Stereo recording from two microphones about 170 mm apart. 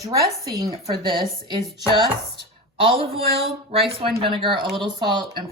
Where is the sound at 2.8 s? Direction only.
35° right (ahead or behind).